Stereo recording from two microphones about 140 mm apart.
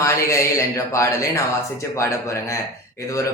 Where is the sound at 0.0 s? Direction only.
20° left (ahead or behind).